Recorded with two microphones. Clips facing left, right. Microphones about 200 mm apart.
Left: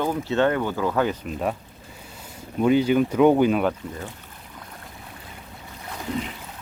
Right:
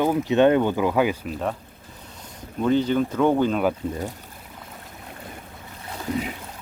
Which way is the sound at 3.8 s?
25° right (ahead or behind).